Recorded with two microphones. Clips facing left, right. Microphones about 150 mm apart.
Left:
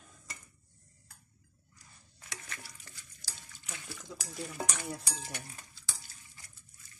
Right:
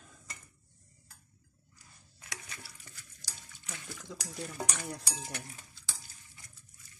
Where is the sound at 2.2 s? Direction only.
5° right (ahead or behind).